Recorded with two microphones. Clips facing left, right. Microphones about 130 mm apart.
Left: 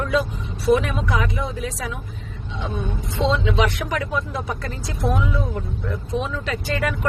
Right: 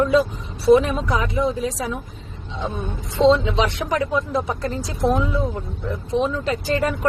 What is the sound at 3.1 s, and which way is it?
A woman's voice, 35° right (ahead or behind).